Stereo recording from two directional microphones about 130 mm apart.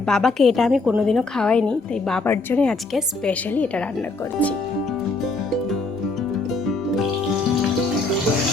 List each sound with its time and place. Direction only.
0.1 s a woman's voice: 5° left (ahead or behind)
2.2 s a woman's voice: 15° left (ahead or behind)